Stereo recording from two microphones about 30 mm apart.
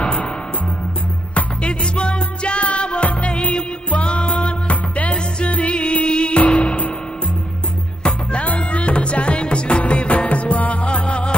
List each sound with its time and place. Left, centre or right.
1.3 s music: left
6.4 s music: left
8.0 s music: left